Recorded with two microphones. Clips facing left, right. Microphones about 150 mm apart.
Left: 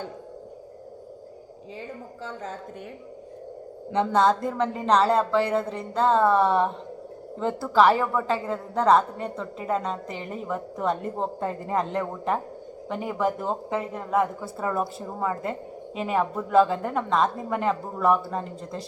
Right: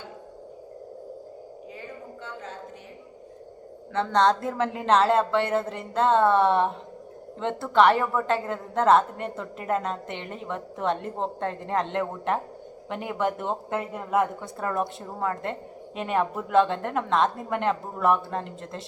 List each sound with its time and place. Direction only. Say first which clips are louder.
2.2 s a woman's voice: left 5 dB; 40° left (ahead or behind)
3.9 s a woman's voice: left 1 dB; 10° left (ahead or behind)